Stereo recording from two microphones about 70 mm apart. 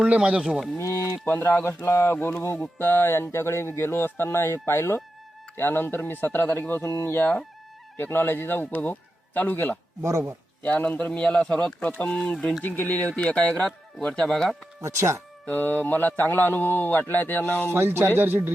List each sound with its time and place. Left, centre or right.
0.0 s speech: centre
0.8 s speech: left
1.2 s speech: left
10.0 s speech: right
10.6 s speech: left
12.6 s speech: left; by 14.5 s centre
14.8 s speech: right
15.4 s speech: left
17.7 s speech: right